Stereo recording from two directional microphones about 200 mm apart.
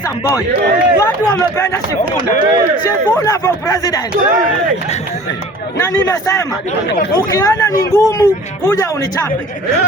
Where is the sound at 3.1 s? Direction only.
15° left (ahead or behind).